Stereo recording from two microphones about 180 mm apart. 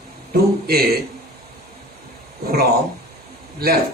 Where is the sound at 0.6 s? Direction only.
55° right (ahead or behind).